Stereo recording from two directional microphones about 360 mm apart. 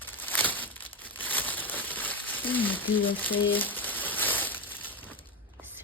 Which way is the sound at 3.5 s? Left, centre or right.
Centre.